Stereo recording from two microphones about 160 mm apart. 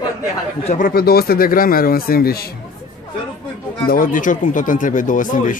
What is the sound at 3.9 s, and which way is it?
Speech, 60° left (ahead or behind).